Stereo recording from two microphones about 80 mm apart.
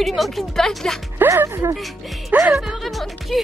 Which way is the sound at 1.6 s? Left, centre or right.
Right.